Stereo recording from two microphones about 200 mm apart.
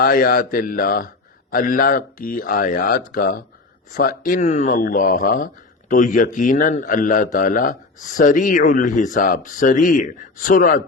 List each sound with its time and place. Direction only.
0.0 s speech: 45° left (ahead or behind)